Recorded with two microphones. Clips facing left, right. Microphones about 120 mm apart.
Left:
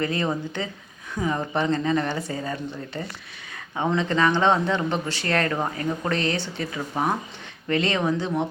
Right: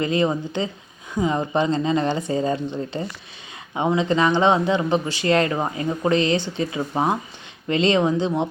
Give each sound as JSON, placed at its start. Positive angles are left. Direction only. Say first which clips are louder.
{"t": 0.0, "sound": "speech", "louder": "right 4 dB", "side_deg": -20}